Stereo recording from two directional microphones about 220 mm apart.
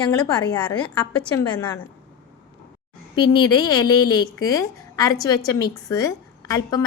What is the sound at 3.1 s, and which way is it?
A woman's voice, 20° left (ahead or behind).